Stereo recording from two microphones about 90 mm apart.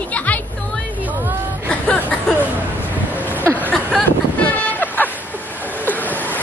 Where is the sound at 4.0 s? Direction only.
15° left (ahead or behind).